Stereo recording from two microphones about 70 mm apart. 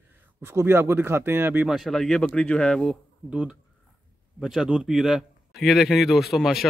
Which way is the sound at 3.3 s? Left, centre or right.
Centre.